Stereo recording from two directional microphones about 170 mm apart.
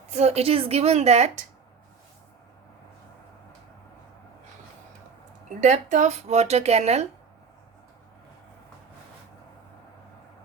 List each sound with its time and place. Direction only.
0.1 s speech: 40° right (ahead or behind)
5.5 s speech: 45° right (ahead or behind)